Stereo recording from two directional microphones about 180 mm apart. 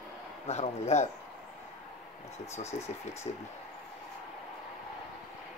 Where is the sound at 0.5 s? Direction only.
35° left (ahead or behind).